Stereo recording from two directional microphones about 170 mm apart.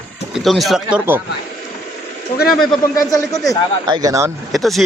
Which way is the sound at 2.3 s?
60° left (ahead or behind).